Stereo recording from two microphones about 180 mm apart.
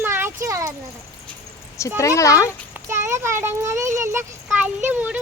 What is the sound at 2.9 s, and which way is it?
A child's voice, 15° right (ahead or behind).